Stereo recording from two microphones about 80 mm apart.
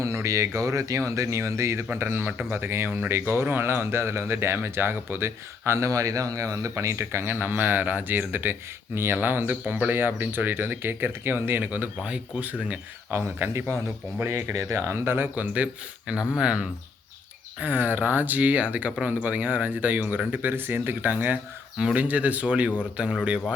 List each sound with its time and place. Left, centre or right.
0.0 s speech: right; by 13.1 s centre
13.1 s speech: right; by 23.1 s centre